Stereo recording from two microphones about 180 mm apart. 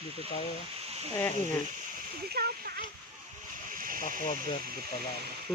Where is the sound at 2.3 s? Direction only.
60° right (ahead or behind).